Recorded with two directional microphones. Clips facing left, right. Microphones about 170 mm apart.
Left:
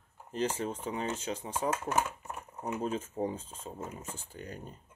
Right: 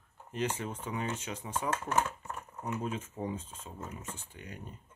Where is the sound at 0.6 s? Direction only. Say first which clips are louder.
Left 2 dB; 35° left (ahead or behind).